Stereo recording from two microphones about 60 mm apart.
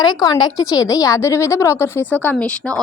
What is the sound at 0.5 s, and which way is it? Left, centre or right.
Speech, left.